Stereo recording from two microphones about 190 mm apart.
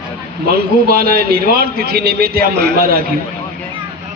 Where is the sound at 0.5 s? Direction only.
50° right (ahead or behind).